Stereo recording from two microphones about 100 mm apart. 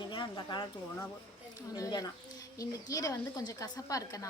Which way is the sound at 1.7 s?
40° left (ahead or behind).